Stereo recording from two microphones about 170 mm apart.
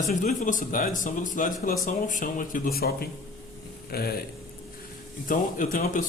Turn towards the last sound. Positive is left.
turn(degrees=50)  # may be behind; listen again after turning